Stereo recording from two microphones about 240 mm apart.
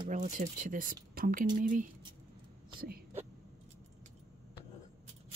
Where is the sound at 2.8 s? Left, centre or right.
Right.